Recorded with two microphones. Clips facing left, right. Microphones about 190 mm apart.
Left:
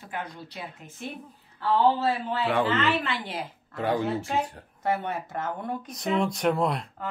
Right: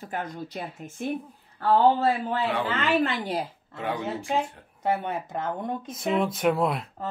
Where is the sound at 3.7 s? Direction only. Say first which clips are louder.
Left 4 dB; 40° left (ahead or behind).